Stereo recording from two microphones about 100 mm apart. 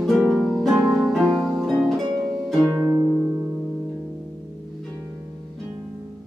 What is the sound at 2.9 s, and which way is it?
Music, 40° right (ahead or behind).